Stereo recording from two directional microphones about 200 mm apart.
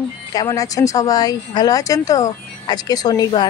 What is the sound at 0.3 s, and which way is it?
Speech, 15° left (ahead or behind).